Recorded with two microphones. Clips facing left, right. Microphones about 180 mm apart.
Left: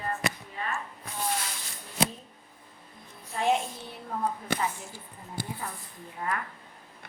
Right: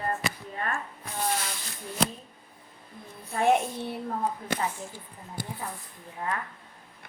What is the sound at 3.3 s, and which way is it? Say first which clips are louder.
Speech: right 3 dB; 55° right (ahead or behind).